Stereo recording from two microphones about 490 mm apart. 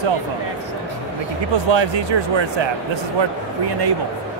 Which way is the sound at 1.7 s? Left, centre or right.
Right.